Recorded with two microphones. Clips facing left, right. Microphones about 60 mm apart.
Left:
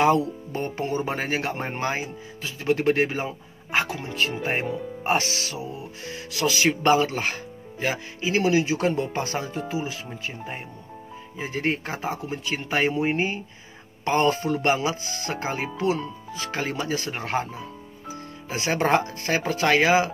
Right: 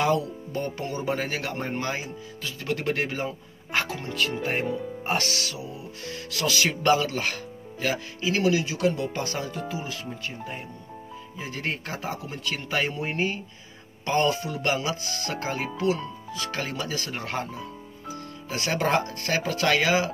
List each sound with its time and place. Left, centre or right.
0.0 s speech: left; by 4.1 s centre
4.1 s speech: left
6.1 s speech: centre
11.3 s speech: left
14.6 s speech: left